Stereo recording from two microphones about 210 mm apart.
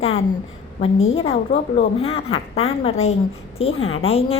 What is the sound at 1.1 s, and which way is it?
A woman's voice, 30° left (ahead or behind).